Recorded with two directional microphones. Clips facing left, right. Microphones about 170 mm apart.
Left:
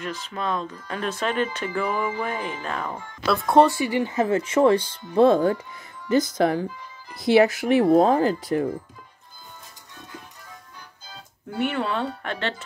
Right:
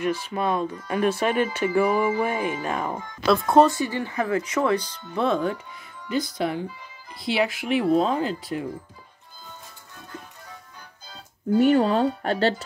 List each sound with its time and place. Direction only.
0.0 s speech: 10° right (ahead or behind)
3.3 s speech: 5° left (ahead or behind); by 8.6 s 45° left (ahead or behind)
11.5 s speech: 40° right (ahead or behind)